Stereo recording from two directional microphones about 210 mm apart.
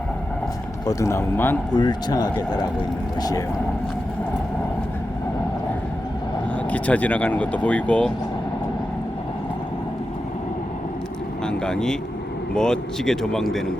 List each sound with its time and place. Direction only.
0.9 s a man's voice: 15° left (ahead or behind)
6.7 s speech: 5° left (ahead or behind)
11.4 s cattle: 5° left (ahead or behind)
12.5 s speech: 5° left (ahead or behind)